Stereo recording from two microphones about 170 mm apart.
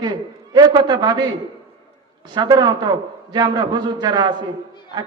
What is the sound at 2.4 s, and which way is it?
A man's voice, 25° right (ahead or behind).